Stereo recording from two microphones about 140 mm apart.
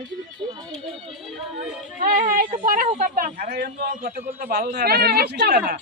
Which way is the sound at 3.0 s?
65° right (ahead or behind).